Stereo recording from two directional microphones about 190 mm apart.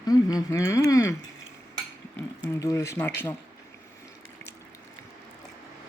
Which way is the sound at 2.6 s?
15° left (ahead or behind).